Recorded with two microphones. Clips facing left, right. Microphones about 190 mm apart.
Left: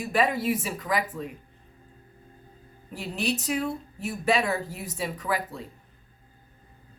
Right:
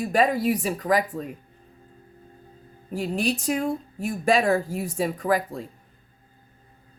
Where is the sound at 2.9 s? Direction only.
45° right (ahead or behind).